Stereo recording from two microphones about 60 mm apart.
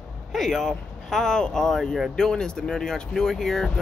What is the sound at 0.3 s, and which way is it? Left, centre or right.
Speech, centre.